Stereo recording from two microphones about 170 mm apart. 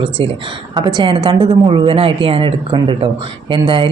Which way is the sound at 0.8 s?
30° right (ahead or behind).